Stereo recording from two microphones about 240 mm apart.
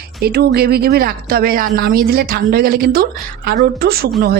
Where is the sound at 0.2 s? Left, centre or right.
Right.